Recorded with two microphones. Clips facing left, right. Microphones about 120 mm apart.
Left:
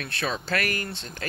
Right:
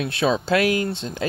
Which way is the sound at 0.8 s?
20° right (ahead or behind).